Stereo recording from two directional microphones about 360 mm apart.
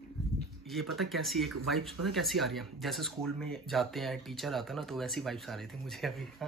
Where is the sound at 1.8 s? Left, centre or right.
Right.